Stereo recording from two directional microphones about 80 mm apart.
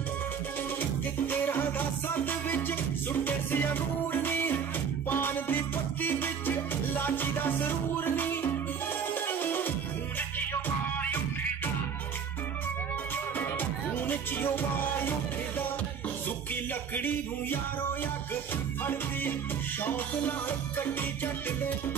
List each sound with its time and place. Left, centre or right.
1.2 s music: left
13.4 s music: left
16.9 s a sound: left
19.8 s music: left